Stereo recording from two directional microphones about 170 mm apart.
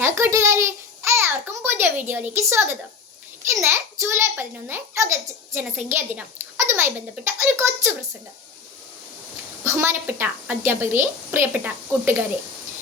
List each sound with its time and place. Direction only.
0.0 s child singing: 15° right (ahead or behind)
1.7 s a sound: 10° right (ahead or behind)
3.4 s a child's voice: 15° right (ahead or behind)
9.6 s a child's voice: 15° right (ahead or behind)